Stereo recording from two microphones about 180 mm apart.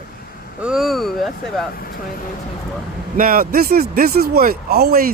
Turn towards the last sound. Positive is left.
turn(degrees=-60)  # may be behind; listen again after turning